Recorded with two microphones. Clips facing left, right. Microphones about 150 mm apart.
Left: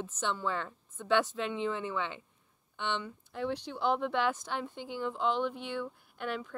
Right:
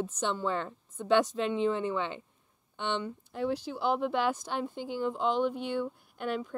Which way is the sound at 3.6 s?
10° right (ahead or behind).